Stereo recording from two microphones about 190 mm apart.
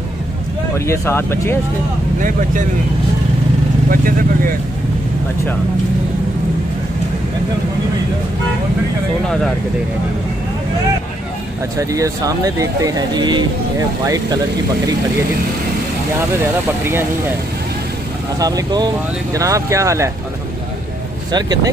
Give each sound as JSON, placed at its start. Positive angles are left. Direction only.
{"t": 0.7, "sound": "speech", "side_deg": 15}
{"t": 2.1, "sound": "speech", "side_deg": -45}
{"t": 3.9, "sound": "speech", "side_deg": -50}
{"t": 11.8, "sound": "speech", "side_deg": -15}
{"t": 16.2, "sound": "speech", "side_deg": -10}
{"t": 18.4, "sound": "speech", "side_deg": -20}
{"t": 21.3, "sound": "speech", "side_deg": -20}